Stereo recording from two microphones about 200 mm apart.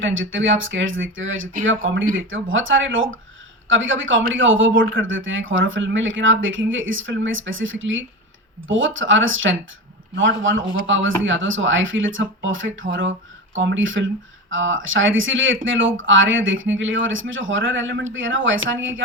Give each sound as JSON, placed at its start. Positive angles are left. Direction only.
{"t": 0.0, "sound": "speech", "side_deg": -75}